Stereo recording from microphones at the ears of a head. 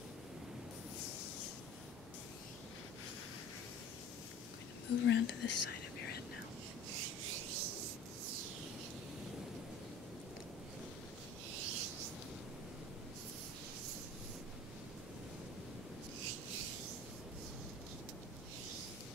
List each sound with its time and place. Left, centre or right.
4.8 s whispering: left
6.9 s rub: right
11.5 s rub: right
16.2 s rub: right